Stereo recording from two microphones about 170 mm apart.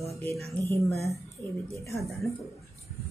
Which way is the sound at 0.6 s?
15° left (ahead or behind).